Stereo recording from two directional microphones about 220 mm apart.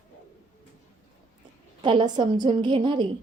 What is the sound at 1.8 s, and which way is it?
A woman's voice, 20° right (ahead or behind).